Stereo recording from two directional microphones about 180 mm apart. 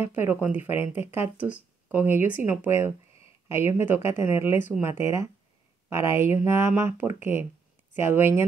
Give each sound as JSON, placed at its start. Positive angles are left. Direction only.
{"t": 0.0, "sound": "speech", "side_deg": -10}